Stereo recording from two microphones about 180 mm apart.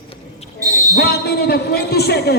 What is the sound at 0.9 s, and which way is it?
Speech, 65° left (ahead or behind).